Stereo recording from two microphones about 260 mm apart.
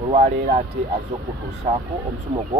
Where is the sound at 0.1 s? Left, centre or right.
Right.